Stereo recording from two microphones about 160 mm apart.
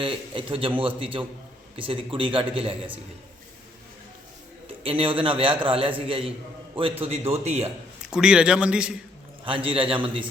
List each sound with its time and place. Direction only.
0.0 s a man's voice: 35° right (ahead or behind)
4.8 s a man's voice: 35° right (ahead or behind)
8.0 s a man's voice: 5° right (ahead or behind)
9.4 s a man's voice: 35° right (ahead or behind)